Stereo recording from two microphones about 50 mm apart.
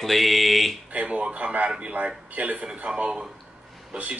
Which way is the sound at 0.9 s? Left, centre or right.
Right.